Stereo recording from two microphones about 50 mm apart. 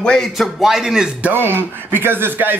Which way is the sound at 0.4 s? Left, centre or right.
Centre.